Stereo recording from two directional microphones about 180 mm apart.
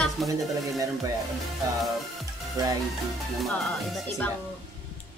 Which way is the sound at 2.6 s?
20° right (ahead or behind).